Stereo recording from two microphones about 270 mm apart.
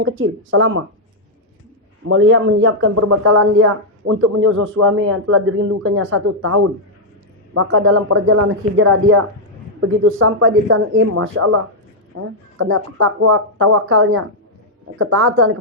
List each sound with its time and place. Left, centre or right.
0.0 s a man's voice: right
2.0 s a man's voice: right